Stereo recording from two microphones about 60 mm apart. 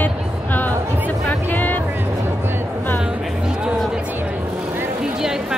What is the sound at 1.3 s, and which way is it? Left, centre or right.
Speech, left.